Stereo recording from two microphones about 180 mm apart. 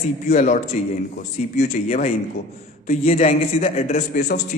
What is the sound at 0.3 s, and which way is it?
A man's voice, 40° left (ahead or behind).